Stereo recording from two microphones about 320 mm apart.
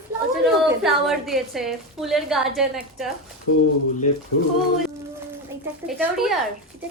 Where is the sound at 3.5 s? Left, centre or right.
Left.